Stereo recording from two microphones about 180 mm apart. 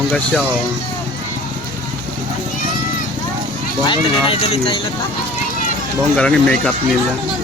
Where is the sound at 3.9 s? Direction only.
30° left (ahead or behind).